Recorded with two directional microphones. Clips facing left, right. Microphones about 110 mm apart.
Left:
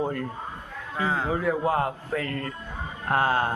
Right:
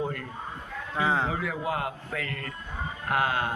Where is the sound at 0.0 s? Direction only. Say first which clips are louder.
Left 4 dB; 25° left (ahead or behind).